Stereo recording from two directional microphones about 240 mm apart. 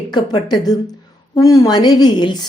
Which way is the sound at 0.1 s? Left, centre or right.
Centre.